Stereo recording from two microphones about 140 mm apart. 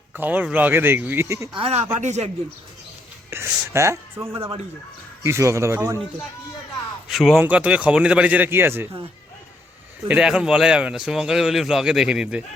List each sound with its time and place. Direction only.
0.1 s speech: 10° right (ahead or behind)
1.5 s speech: 45° right (ahead or behind)
3.2 s speech: 15° right (ahead or behind)
7.1 s a man's voice: centre (ahead or behind)
10.1 s a man's voice: 5° right (ahead or behind)